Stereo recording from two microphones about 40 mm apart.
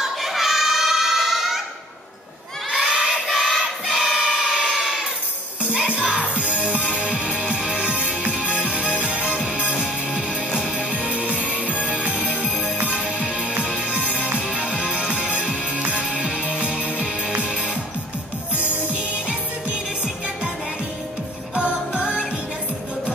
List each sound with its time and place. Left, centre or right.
0.0 s a sound: centre
2.7 s crowd: centre
4.0 s a sound: centre
5.9 s music: right
9.8 s music: centre
10.8 s music: right
11.4 s music: left
12.9 s music: right
18.6 s music: left
21.9 s music: right